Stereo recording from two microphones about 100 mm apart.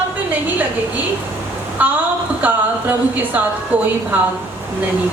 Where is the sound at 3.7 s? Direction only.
15° right (ahead or behind).